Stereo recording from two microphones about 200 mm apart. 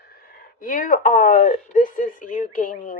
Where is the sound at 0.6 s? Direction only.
40° left (ahead or behind).